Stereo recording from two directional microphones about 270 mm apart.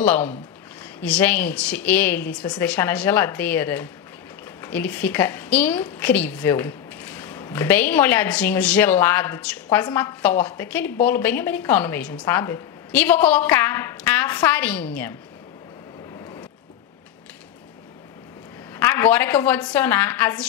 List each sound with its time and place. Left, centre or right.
0.0 s a woman's voice: centre
18.8 s a woman's voice: centre